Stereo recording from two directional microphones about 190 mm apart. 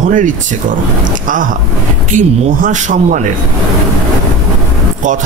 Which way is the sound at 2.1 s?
40° right (ahead or behind).